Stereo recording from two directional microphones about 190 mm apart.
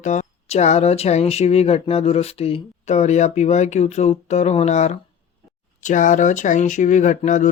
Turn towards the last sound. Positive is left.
turn(degrees=40)  # may be behind; listen again after turning